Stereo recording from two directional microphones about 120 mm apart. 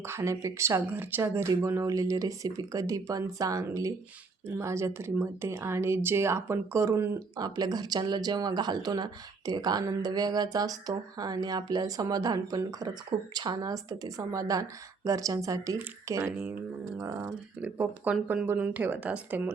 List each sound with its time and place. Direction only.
0.0 s speech: 20° right (ahead or behind)
7.3 s speech: 35° right (ahead or behind); by 19.5 s 10° right (ahead or behind)